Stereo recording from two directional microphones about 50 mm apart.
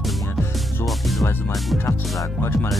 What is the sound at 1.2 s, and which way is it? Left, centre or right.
Speech, left.